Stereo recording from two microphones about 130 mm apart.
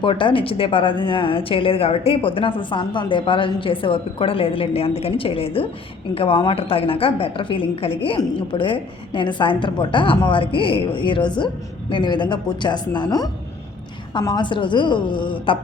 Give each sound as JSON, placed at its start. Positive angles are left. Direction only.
{"t": 0.0, "sound": "a woman's voice", "side_deg": 40}